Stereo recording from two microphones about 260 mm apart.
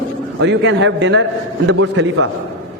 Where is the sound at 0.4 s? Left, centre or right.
Right.